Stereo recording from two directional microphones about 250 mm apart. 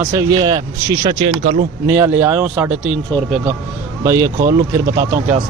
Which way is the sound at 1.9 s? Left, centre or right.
Centre.